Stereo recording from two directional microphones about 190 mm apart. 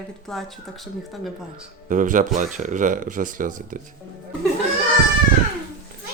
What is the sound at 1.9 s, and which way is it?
Speech, 45° right (ahead or behind).